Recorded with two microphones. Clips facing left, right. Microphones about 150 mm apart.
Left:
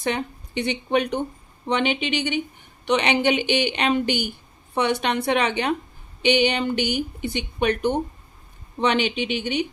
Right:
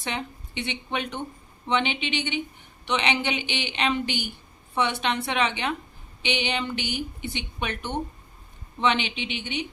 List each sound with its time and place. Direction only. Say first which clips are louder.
0.0 s speech: left 7 dB; 45° left (ahead or behind)